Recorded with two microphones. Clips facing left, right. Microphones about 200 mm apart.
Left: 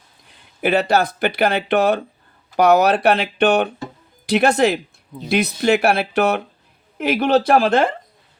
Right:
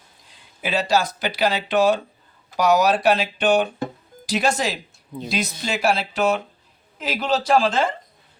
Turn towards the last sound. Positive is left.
turn(degrees=60)  # may be behind; listen again after turning